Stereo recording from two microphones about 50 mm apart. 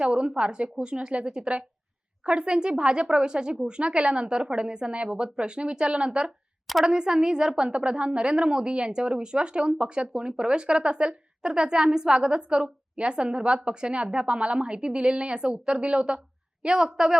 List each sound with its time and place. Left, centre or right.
0.0 s a woman's voice: centre